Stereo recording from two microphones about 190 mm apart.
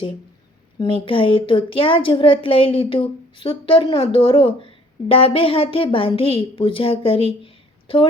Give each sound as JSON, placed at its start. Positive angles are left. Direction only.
{"t": 0.8, "sound": "speech", "side_deg": 25}